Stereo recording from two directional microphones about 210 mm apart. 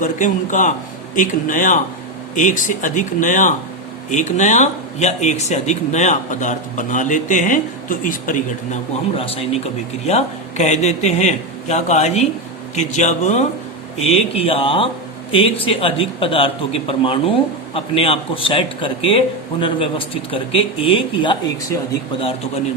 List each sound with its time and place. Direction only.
0.0 s speech: 40° left (ahead or behind)